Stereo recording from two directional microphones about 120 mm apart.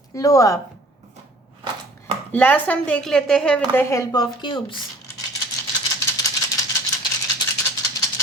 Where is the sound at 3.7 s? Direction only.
25° left (ahead or behind).